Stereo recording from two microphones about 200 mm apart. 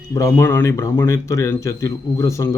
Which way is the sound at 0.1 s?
15° left (ahead or behind).